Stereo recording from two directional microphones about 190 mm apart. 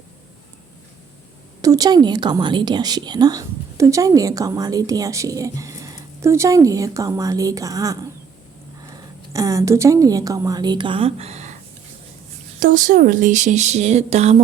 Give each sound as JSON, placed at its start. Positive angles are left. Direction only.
{"t": 1.6, "sound": "speech", "side_deg": -20}
{"t": 9.3, "sound": "a woman's voice", "side_deg": -15}
{"t": 12.5, "sound": "speech", "side_deg": -45}